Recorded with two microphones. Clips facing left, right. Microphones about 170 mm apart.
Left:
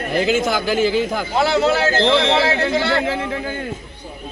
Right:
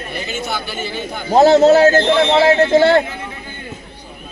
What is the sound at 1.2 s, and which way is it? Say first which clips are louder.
A man's voice: right 11 dB; 45° right (ahead or behind).